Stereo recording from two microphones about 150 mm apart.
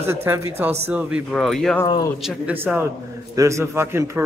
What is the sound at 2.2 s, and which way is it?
A man's voice, 10° right (ahead or behind).